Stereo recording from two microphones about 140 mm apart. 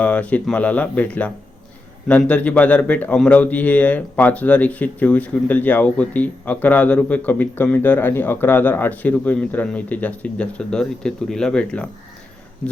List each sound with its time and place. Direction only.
0.0 s a man's voice: 10° left (ahead or behind)